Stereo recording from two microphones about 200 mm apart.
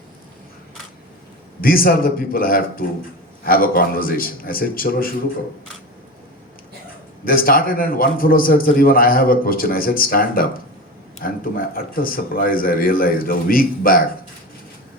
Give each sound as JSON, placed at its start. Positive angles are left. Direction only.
{"t": 1.6, "sound": "a man's voice", "side_deg": 45}
{"t": 7.3, "sound": "a man's voice", "side_deg": 45}